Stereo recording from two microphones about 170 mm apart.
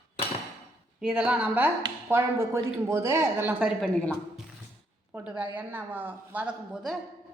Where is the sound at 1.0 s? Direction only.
5° right (ahead or behind).